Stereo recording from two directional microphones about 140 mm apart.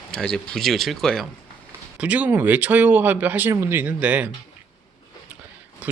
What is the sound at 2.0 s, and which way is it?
Speech, 10° right (ahead or behind).